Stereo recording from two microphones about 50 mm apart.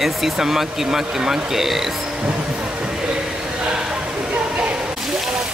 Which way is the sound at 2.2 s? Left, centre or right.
Right.